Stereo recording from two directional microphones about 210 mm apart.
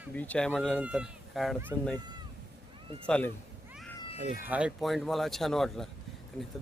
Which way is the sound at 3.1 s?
5° left (ahead or behind).